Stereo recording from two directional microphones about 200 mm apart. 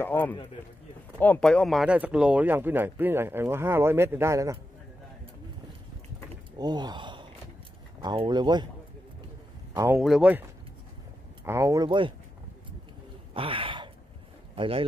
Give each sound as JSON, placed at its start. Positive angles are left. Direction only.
{"t": 0.0, "sound": "a man's voice", "side_deg": 10}
{"t": 6.6, "sound": "speech", "side_deg": -20}
{"t": 9.9, "sound": "speech", "side_deg": -5}
{"t": 11.4, "sound": "speech", "side_deg": -15}
{"t": 13.3, "sound": "a sound", "side_deg": -25}
{"t": 14.5, "sound": "speech", "side_deg": -25}